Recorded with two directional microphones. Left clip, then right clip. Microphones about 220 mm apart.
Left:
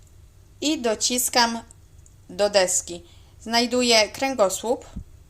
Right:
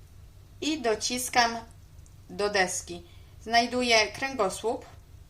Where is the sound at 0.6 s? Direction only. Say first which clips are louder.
Left 5 dB; 35° left (ahead or behind).